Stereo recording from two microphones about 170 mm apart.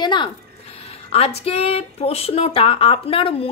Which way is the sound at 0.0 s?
25° left (ahead or behind).